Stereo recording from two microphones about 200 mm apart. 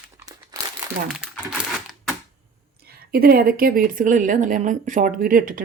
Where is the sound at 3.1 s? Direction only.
50° right (ahead or behind).